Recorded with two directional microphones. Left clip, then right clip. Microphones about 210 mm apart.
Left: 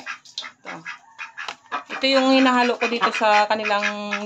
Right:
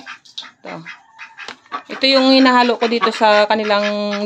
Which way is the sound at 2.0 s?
55° right (ahead or behind).